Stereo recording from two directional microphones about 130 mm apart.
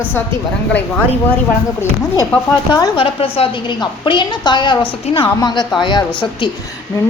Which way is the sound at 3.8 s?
35° left (ahead or behind).